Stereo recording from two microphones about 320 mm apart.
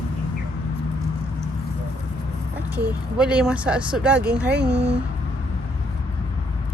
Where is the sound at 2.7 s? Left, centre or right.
Centre.